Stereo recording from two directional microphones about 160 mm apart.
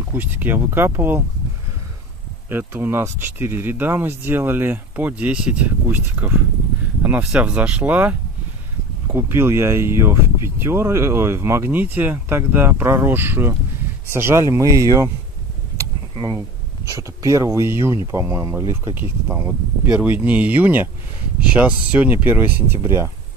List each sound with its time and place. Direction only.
0.1 s speech: 15° right (ahead or behind)
2.5 s speech: 15° right (ahead or behind)